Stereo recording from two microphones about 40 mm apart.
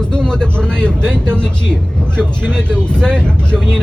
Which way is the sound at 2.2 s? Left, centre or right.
Left.